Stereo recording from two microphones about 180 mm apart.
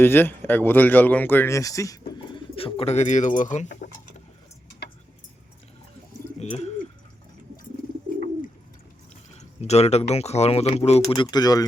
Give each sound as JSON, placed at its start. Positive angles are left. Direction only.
{"t": 0.0, "sound": "speech", "side_deg": 10}
{"t": 6.4, "sound": "bird", "side_deg": 35}
{"t": 9.6, "sound": "speech", "side_deg": 35}